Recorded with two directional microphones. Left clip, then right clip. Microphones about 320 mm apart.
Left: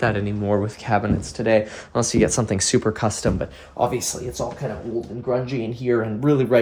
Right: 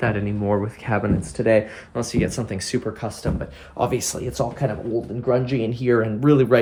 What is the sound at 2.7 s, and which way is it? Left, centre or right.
Speech, left.